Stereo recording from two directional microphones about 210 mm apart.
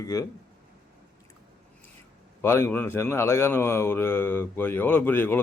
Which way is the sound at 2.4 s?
10° left (ahead or behind).